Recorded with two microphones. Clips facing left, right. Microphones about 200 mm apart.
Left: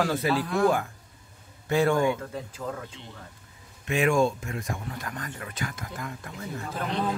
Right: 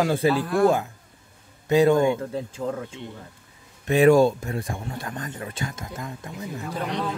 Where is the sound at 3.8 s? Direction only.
35° right (ahead or behind).